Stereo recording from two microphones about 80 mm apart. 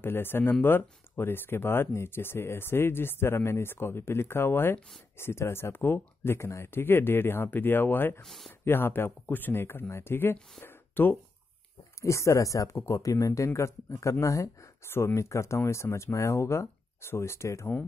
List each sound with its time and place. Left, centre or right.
0.0 s speech: left
8.2 s speech: centre
8.5 s speech: left
10.6 s a sound: left
12.0 s speech: left